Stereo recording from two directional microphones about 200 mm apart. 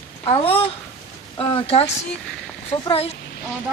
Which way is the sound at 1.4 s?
25° left (ahead or behind).